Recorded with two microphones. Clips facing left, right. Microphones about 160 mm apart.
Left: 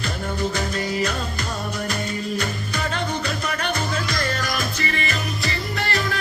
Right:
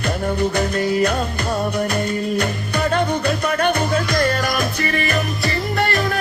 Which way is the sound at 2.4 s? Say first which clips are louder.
Right 6 dB; 55° right (ahead or behind).